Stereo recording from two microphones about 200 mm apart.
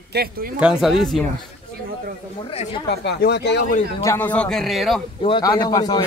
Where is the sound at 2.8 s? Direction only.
55° left (ahead or behind).